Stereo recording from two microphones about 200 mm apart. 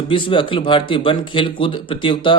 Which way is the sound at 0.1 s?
25° left (ahead or behind).